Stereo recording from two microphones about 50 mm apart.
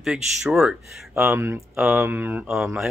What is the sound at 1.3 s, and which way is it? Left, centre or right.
Speech, right.